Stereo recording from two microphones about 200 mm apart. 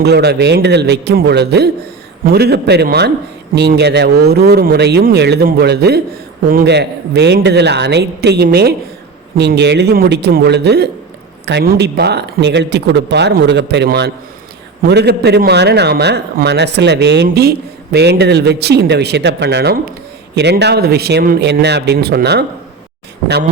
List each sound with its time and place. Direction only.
0.0 s a man's voice: 55° right (ahead or behind)